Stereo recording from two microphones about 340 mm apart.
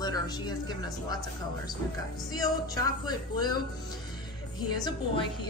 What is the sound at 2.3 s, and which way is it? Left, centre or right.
A woman's voice, centre.